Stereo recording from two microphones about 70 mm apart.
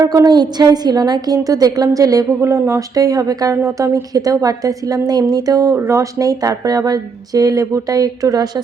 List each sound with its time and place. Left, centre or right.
0.3 s speech: right
2.4 s a sound: right
2.9 s speech: right
3.5 s a woman's voice: right
4.1 s speech: right
5.7 s speech: right